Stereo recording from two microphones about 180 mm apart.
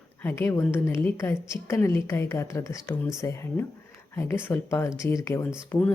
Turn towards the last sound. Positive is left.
turn(degrees=10)  # may be behind; listen again after turning